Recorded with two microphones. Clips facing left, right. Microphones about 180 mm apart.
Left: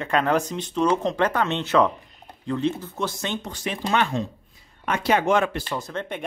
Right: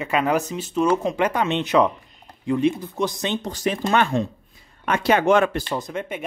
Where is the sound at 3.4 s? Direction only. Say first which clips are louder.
Right 5 dB; 40° right (ahead or behind).